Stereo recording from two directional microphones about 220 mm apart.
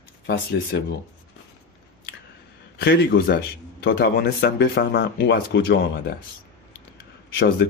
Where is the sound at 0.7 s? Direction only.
50° left (ahead or behind).